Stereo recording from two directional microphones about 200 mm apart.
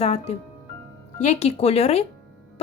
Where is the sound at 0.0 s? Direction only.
30° left (ahead or behind).